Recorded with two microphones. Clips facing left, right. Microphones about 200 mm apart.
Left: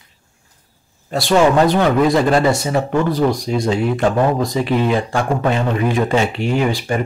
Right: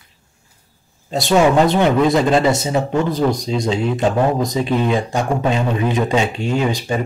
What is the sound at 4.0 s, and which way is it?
Speech, 20° right (ahead or behind).